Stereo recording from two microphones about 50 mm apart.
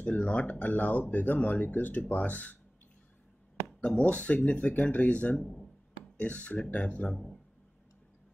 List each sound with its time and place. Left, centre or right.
0.0 s speech: left
3.8 s speech: left
5.4 s speech: centre
6.1 s speech: left
7.1 s speech: centre